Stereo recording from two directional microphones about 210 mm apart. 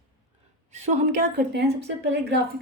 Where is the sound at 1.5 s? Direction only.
50° right (ahead or behind).